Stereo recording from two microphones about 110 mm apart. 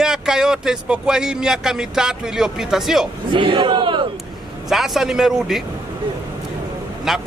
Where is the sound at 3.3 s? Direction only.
50° right (ahead or behind).